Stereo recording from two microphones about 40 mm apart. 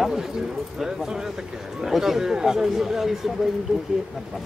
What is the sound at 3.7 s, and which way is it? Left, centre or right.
Speech, right.